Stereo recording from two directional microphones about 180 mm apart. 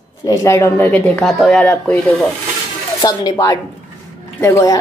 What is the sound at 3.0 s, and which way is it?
Speech, 20° left (ahead or behind).